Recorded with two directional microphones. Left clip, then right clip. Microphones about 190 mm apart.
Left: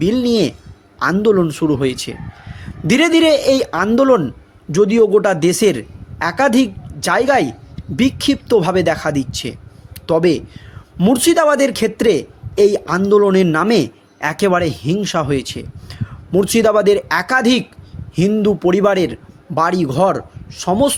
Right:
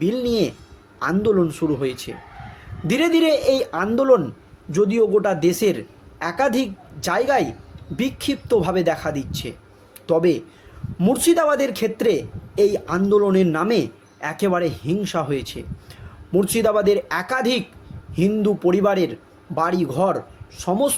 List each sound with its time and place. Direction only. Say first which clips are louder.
0.0 s a woman's voice: left 5 dB; 45° left (ahead or behind)